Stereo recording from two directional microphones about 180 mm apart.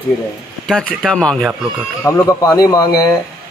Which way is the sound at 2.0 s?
15° left (ahead or behind).